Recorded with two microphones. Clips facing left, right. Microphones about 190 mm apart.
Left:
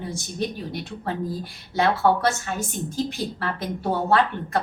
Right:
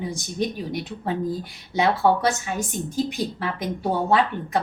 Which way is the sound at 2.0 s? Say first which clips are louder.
Right 1 dB; 15° right (ahead or behind).